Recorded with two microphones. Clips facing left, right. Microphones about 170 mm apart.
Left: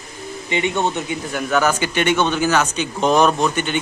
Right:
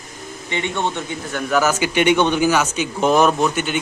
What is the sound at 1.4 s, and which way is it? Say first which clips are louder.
Speech: right 1 dB; 5° right (ahead or behind).